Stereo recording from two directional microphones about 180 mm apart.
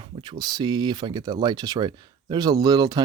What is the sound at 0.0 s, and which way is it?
Speech, 25° right (ahead or behind).